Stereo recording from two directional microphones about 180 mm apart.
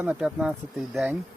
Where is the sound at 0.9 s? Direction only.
5° right (ahead or behind).